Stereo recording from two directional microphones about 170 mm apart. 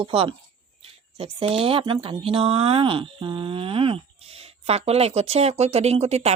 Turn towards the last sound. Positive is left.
turn(degrees=-40)  # may be behind; listen again after turning